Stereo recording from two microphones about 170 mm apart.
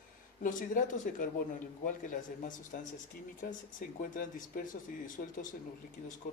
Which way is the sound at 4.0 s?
55° left (ahead or behind).